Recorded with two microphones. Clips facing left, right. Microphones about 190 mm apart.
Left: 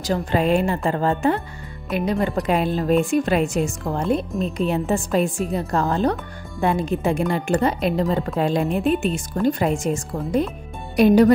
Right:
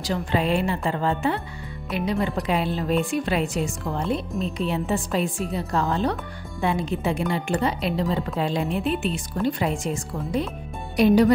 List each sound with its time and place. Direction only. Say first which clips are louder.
0.0 s speech: left 4 dB; 45° left (ahead or behind)